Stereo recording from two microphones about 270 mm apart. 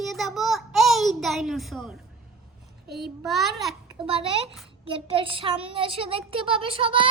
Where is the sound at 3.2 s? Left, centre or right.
Centre.